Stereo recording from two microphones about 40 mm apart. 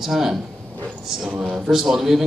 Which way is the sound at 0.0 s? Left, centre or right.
Centre.